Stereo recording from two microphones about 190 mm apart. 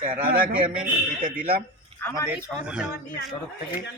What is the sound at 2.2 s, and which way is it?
Speech, 5° right (ahead or behind).